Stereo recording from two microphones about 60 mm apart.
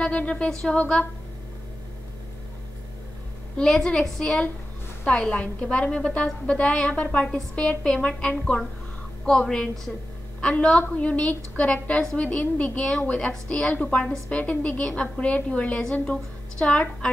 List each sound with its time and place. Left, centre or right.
0.0 s speech: centre
0.5 s a woman's voice: centre
3.5 s a woman's voice: centre
10.8 s a woman's voice: left